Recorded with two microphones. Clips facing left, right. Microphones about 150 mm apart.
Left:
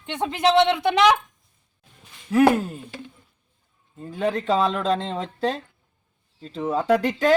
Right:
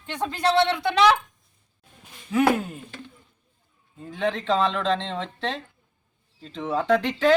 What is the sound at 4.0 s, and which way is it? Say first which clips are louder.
A man's voice: left 2 dB; 10° left (ahead or behind).